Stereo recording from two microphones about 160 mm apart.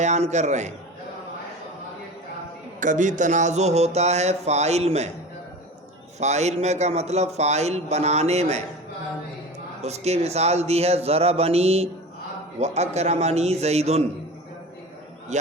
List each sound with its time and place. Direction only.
0.0 s a man's voice: 45° right (ahead or behind)
2.8 s a man's voice: 50° right (ahead or behind)
6.1 s a man's voice: 45° right (ahead or behind)
9.8 s a man's voice: 45° right (ahead or behind)
15.3 s a man's voice: 45° right (ahead or behind)